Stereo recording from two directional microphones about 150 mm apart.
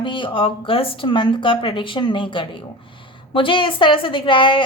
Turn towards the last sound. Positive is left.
turn(degrees=35)  # may be behind; listen again after turning